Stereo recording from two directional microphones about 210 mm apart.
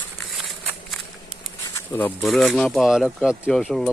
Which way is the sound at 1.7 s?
10° left (ahead or behind).